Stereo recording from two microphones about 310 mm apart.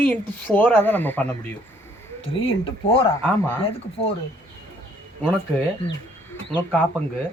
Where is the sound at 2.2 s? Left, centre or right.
Centre.